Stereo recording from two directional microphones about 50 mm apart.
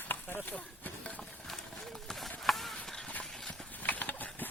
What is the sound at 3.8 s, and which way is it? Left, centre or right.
Horse, left.